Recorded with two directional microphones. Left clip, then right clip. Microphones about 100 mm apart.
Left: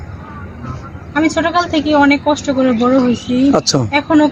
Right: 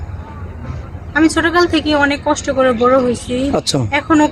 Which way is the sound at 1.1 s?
45° right (ahead or behind).